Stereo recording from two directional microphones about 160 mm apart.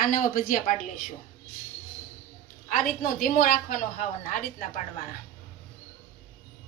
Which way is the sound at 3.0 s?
65° left (ahead or behind).